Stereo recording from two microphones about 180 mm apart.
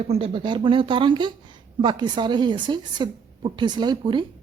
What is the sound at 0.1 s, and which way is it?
Speech, 30° right (ahead or behind).